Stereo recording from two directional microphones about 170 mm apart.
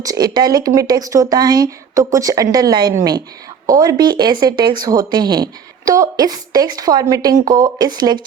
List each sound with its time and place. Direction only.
0.0 s speech: 25° right (ahead or behind)